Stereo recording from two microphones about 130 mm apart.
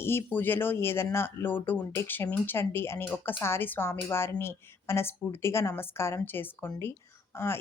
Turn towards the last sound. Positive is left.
turn(degrees=20)  # may be behind; listen again after turning